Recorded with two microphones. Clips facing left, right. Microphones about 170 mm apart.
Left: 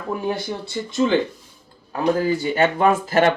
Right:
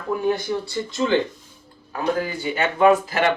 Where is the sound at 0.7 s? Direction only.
15° left (ahead or behind).